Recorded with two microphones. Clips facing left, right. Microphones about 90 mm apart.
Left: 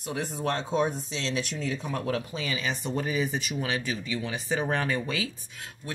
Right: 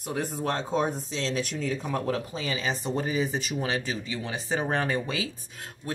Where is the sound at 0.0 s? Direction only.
45° right (ahead or behind).